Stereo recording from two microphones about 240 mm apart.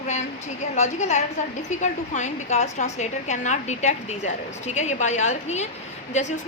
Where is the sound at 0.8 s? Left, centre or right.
Left.